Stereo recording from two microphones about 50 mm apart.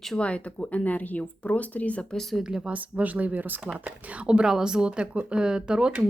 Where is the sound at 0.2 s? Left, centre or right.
Left.